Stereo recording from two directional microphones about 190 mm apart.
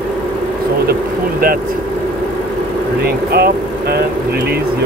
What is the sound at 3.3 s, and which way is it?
Speech, 55° right (ahead or behind).